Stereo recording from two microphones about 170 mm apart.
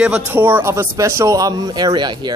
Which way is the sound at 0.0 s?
10° right (ahead or behind).